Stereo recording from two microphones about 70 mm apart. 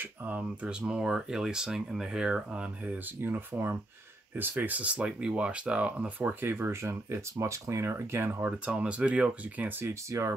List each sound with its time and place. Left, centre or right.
0.0 s speech: right
3.3 s speech: right
8.4 s speech: centre
9.7 s speech: right